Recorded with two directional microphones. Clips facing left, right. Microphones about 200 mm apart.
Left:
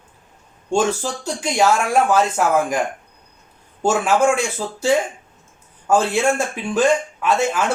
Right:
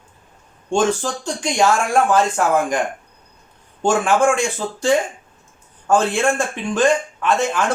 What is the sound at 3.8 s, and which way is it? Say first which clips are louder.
Speech: right 1 dB; 5° left (ahead or behind).